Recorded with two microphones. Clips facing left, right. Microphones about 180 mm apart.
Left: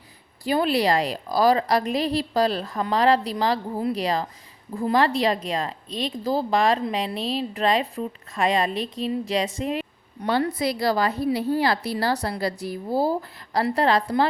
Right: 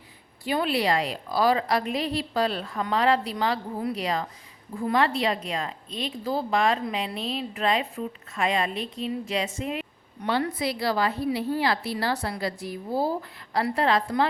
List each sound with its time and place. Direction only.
0.4 s a woman's voice: 40° left (ahead or behind)